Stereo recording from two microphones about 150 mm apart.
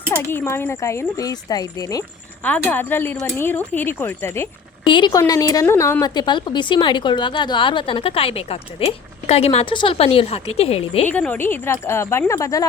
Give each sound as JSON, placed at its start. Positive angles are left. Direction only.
{"t": 0.1, "sound": "speech", "side_deg": 15}
{"t": 2.4, "sound": "speech", "side_deg": 10}
{"t": 4.9, "sound": "a woman's voice", "side_deg": 30}
{"t": 11.1, "sound": "speech", "side_deg": 10}